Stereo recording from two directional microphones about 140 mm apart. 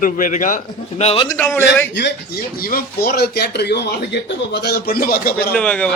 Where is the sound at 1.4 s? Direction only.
15° left (ahead or behind).